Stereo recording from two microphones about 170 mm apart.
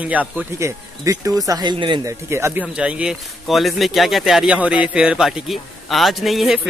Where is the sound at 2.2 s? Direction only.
15° right (ahead or behind).